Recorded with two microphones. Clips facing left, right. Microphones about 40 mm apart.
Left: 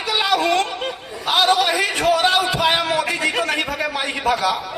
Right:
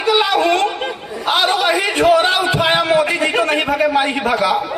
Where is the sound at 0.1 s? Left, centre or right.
Right.